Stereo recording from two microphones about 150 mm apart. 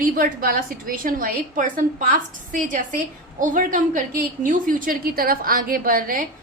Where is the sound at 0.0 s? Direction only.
70° right (ahead or behind).